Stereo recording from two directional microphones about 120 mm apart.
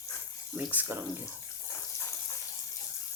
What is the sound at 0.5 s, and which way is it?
Speech, 15° right (ahead or behind).